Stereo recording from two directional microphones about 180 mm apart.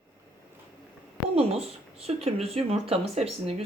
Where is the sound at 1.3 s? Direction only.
35° right (ahead or behind).